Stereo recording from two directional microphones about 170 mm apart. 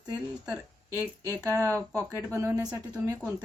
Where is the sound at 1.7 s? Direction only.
10° left (ahead or behind).